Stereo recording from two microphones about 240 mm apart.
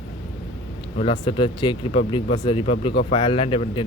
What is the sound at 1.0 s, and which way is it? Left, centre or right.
Speech, left.